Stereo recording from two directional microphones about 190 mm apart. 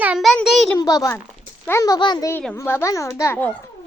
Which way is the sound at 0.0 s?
5° right (ahead or behind).